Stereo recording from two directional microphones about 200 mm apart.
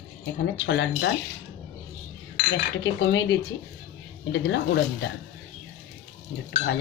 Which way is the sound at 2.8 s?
60° left (ahead or behind).